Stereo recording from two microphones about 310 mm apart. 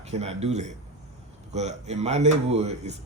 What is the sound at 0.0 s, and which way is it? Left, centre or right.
Speech, right.